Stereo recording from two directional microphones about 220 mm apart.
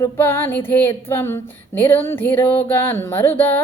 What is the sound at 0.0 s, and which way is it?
Mantra, 10° left (ahead or behind).